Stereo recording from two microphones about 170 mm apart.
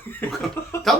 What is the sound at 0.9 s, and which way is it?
Speech, centre (ahead or behind).